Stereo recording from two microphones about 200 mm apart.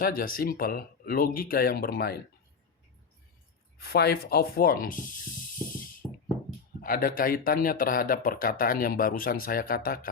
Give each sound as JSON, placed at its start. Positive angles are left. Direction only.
{"t": 0.0, "sound": "speech", "side_deg": 45}
{"t": 3.8, "sound": "speech", "side_deg": 55}
{"t": 6.8, "sound": "speech", "side_deg": 45}